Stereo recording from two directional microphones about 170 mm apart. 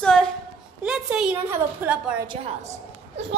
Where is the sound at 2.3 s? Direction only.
40° right (ahead or behind).